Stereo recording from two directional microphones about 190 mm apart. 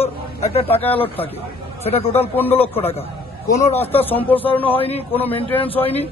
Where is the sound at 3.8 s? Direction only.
10° left (ahead or behind).